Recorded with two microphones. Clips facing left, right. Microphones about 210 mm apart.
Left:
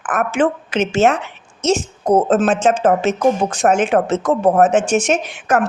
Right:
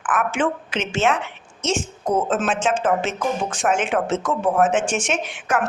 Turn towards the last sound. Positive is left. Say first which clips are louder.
# left 5 dB
turn(degrees=40)  # may be behind; listen again after turning